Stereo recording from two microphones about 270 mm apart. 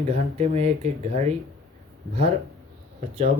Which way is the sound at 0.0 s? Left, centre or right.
Right.